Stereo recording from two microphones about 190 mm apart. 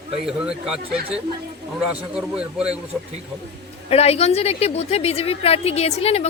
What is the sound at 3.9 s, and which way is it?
A woman's voice, 35° left (ahead or behind).